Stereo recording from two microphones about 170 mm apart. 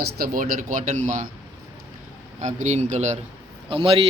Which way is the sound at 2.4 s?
45° right (ahead or behind).